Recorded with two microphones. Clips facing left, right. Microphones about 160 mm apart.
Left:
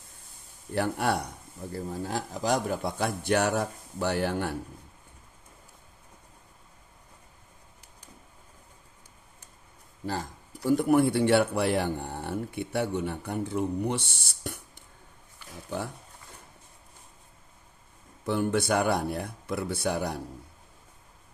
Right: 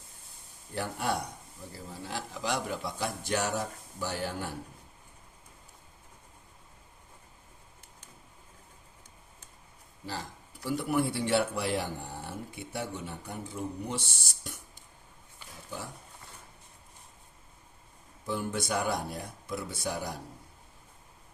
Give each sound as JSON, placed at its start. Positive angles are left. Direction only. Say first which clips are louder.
{"t": 0.8, "sound": "speech", "louder": "left 6 dB", "side_deg": 65}
{"t": 1.7, "sound": "speech", "louder": "left 7 dB", "side_deg": 45}
{"t": 10.1, "sound": "speech", "louder": "left 6 dB", "side_deg": 50}
{"t": 14.4, "sound": "a sound", "louder": "left 8 dB", "side_deg": 60}
{"t": 18.3, "sound": "speech", "louder": "left 6 dB", "side_deg": 65}